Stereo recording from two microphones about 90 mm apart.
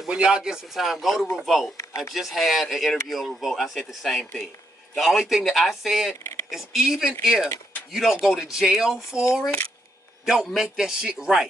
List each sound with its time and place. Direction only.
0.1 s speech: 10° right (ahead or behind)
1.8 s speech: 35° left (ahead or behind)
2.1 s speech: centre (ahead or behind)
10.2 s speech: 5° right (ahead or behind)